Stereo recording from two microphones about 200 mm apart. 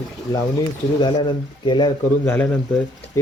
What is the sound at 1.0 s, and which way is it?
Speech, 25° left (ahead or behind).